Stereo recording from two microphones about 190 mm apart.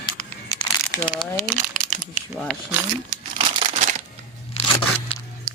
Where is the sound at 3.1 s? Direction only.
35° right (ahead or behind).